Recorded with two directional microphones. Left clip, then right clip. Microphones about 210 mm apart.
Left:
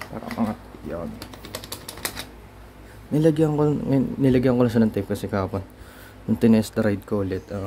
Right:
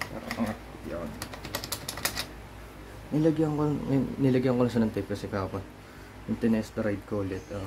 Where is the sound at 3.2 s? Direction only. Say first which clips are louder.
Left 6 dB; 45° left (ahead or behind); by 5.6 s 30° left (ahead or behind).